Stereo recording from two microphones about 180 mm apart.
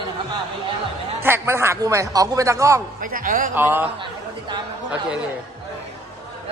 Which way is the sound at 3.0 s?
50° right (ahead or behind).